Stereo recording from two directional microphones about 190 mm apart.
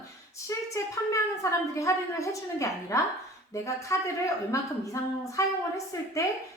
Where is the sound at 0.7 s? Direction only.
15° left (ahead or behind).